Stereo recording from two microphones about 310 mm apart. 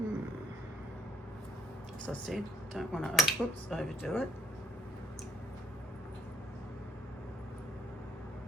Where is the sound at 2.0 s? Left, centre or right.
Centre.